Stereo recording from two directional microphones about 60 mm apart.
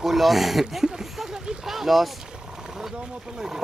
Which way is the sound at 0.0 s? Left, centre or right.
Centre.